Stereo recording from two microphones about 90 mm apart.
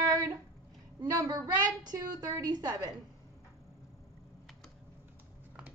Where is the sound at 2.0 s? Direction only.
40° right (ahead or behind).